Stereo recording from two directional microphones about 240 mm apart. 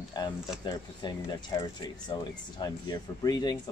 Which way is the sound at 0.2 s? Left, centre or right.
Centre.